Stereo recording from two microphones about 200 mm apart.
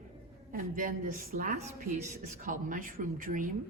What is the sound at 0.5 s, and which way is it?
A woman's voice, 45° right (ahead or behind).